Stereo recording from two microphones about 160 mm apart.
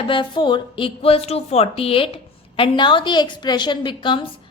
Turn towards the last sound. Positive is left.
turn(degrees=30)  # may be behind; listen again after turning